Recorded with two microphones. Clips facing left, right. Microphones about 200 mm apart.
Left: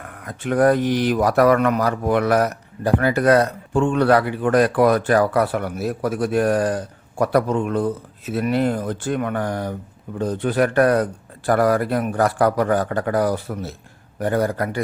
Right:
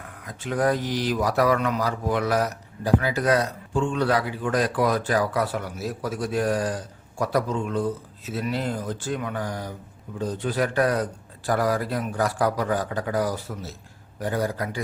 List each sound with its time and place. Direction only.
0.3 s speech: 60° left (ahead or behind)